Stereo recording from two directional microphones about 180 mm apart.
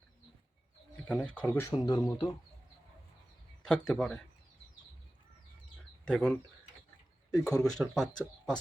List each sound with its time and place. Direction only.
1.0 s speech: 5° left (ahead or behind)
1.5 s speech: 15° left (ahead or behind)
3.6 s speech: 5° left (ahead or behind)
6.1 s speech: 5° left (ahead or behind)
7.4 s speech: 5° left (ahead or behind)